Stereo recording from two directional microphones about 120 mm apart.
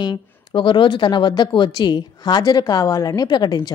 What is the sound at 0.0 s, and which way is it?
A woman's voice, 35° left (ahead or behind).